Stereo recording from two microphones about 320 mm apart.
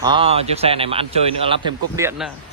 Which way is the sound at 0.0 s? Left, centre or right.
Centre.